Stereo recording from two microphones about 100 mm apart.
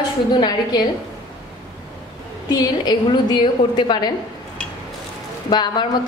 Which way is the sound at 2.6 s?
40° left (ahead or behind).